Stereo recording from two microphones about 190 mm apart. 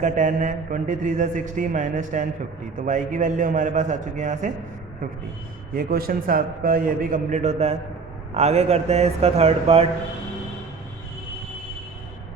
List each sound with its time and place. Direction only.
0.0 s a man's voice: 40° right (ahead or behind)
5.7 s a man's voice: 50° right (ahead or behind); by 9.8 s 35° right (ahead or behind)